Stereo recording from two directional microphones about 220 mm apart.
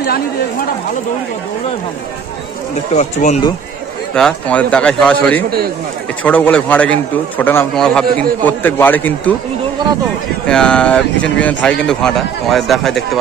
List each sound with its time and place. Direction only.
3.0 s speech: 30° left (ahead or behind)
4.1 s a man's voice: 5° left (ahead or behind)
10.4 s a man's voice: 5° left (ahead or behind)